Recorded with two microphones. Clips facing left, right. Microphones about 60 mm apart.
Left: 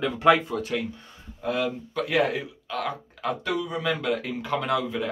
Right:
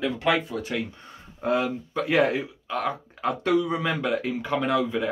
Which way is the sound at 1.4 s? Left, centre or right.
Right.